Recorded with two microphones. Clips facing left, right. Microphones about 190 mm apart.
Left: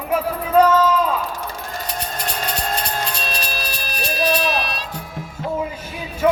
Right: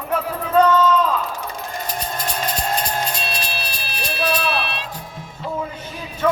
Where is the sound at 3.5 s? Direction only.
40° left (ahead or behind).